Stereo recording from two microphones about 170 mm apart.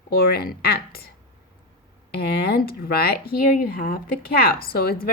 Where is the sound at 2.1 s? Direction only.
65° left (ahead or behind).